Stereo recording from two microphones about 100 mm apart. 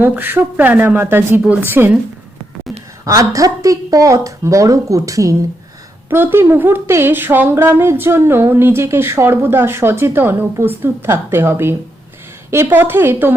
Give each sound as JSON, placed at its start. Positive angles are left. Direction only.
{"t": 0.0, "sound": "speech", "side_deg": -20}
{"t": 3.1, "sound": "speech", "side_deg": -35}
{"t": 6.1, "sound": "speech", "side_deg": -20}